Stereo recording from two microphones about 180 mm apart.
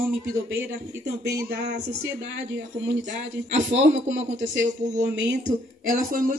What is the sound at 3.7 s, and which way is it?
Speech, 40° right (ahead or behind).